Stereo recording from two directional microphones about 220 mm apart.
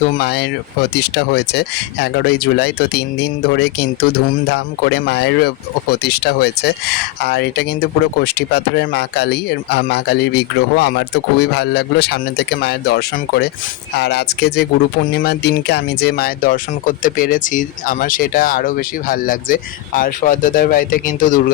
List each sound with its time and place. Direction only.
0.2 s speech: 45° left (ahead or behind)